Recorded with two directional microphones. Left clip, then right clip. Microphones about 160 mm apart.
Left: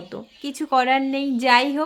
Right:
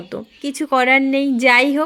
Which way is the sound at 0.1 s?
25° right (ahead or behind).